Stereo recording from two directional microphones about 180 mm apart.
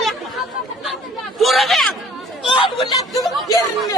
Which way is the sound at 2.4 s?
25° left (ahead or behind).